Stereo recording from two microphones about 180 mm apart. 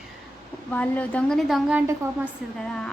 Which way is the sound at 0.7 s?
10° left (ahead or behind).